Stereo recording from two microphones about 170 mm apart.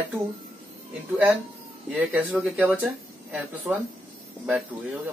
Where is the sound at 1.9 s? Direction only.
5° right (ahead or behind).